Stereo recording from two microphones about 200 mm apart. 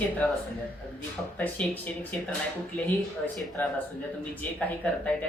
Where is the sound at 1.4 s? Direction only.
10° left (ahead or behind).